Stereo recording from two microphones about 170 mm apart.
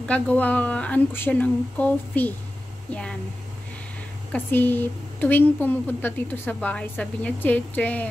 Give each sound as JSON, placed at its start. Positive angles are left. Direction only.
{"t": 0.1, "sound": "a woman's voice", "side_deg": 10}
{"t": 4.3, "sound": "a woman's voice", "side_deg": 10}